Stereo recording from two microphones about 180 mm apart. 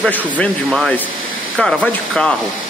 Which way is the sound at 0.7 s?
Centre (ahead or behind).